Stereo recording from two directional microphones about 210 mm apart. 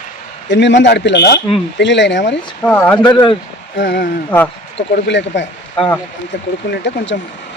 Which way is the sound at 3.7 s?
55° left (ahead or behind).